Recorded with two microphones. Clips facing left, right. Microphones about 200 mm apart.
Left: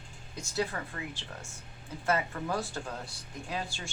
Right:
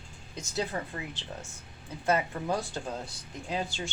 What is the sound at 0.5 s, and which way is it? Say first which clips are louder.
Speech: right 1 dB; 20° right (ahead or behind).